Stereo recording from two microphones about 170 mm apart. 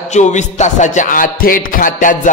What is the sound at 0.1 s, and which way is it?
Music, 45° left (ahead or behind).